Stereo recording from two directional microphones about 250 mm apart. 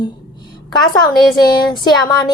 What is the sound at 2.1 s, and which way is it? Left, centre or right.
Speech, centre.